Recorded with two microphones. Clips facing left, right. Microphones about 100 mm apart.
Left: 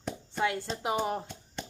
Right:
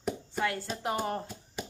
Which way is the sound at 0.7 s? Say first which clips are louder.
Left 1 dB; 10° left (ahead or behind).